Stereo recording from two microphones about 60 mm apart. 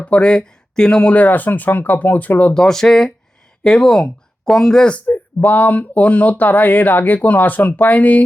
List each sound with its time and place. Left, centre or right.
0.0 s speech: left
2.6 s speech: centre
5.0 s speech: left